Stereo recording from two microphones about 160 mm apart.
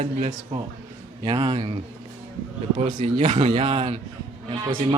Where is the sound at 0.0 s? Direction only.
45° right (ahead or behind).